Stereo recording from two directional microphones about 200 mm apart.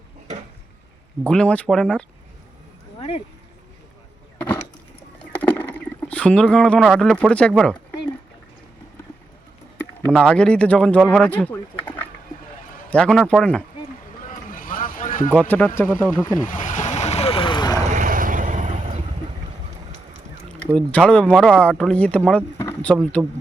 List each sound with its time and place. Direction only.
1.2 s speech: 5° left (ahead or behind)
5.2 s rowboat: 10° left (ahead or behind)
10.1 s speech: 5° left (ahead or behind)
14.3 s a sound: 45° left (ahead or behind)
15.3 s speech: 10° left (ahead or behind)
16.4 s vehicle: 40° left (ahead or behind); by 17.7 s 20° left (ahead or behind)
17.8 s vehicle: 40° right (ahead or behind)
20.7 s speech: 5° left (ahead or behind)